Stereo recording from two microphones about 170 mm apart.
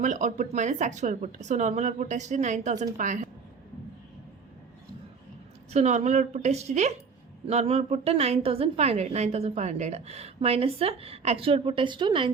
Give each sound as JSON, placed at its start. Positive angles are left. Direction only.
{"t": 0.0, "sound": "speech", "side_deg": -45}
{"t": 5.7, "sound": "a woman's voice", "side_deg": -40}